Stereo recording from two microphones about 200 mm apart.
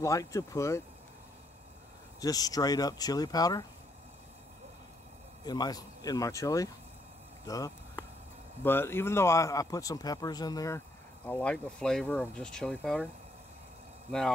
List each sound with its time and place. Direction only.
0.0 s speech: 15° left (ahead or behind)
2.1 s speech: 20° left (ahead or behind)
5.4 s speech: 20° left (ahead or behind)
11.2 s speech: 5° left (ahead or behind)